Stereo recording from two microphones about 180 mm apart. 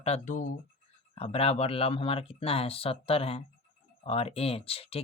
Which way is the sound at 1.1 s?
30° left (ahead or behind).